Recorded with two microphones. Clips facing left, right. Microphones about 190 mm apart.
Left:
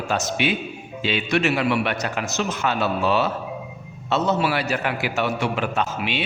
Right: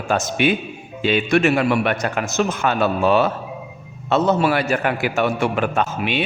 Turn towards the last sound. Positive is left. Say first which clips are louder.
# right 3 dB
turn(degrees=-50)  # may be behind; listen again after turning